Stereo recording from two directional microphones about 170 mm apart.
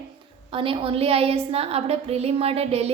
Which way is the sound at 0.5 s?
30° right (ahead or behind).